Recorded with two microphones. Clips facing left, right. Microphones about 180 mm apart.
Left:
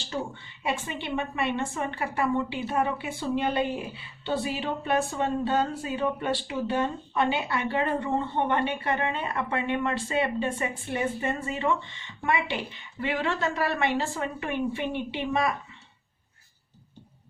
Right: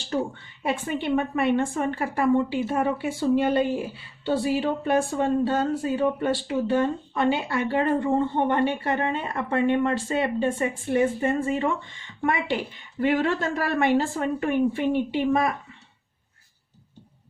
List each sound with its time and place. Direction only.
0.6 s speech: 50° right (ahead or behind)
4.3 s speech: 45° right (ahead or behind)